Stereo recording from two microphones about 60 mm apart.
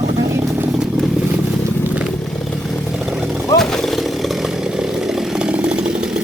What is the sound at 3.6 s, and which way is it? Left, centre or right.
Chainsaw, centre.